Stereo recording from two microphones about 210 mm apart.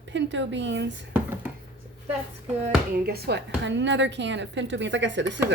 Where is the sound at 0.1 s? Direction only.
60° right (ahead or behind).